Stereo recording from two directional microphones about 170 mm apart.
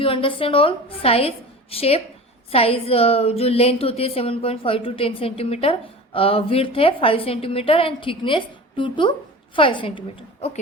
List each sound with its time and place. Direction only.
0.0 s a woman's voice: 30° left (ahead or behind)